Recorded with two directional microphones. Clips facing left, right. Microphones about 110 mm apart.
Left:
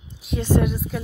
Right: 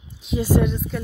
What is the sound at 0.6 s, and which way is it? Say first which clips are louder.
Speech: right 1 dB; 5° left (ahead or behind).